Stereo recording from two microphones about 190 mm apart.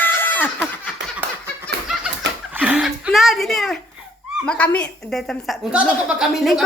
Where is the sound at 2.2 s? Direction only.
65° right (ahead or behind).